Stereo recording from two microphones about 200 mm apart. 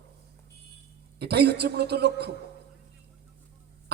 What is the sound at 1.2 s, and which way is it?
A man's voice, 55° right (ahead or behind).